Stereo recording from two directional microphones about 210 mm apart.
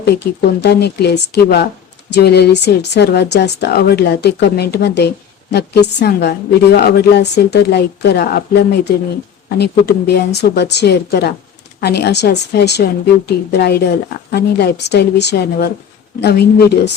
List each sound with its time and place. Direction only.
0.0 s speech: 50° left (ahead or behind)